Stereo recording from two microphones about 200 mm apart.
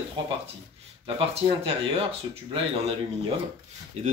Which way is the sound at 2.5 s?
30° right (ahead or behind).